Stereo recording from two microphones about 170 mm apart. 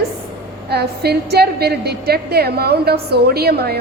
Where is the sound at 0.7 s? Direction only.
70° right (ahead or behind).